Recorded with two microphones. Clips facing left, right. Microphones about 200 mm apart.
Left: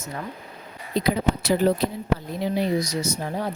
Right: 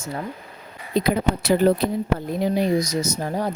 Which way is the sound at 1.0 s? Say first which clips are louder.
Right 2 dB; 55° right (ahead or behind).